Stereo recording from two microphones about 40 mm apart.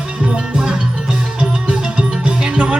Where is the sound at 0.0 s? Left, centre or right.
Right.